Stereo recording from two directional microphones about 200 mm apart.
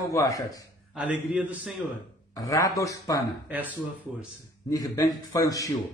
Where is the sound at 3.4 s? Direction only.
10° right (ahead or behind).